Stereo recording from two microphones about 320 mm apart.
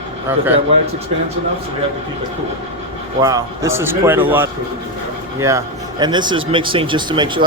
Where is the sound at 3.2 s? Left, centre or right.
Centre.